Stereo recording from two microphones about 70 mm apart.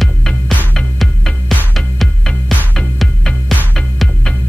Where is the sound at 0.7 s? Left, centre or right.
Centre.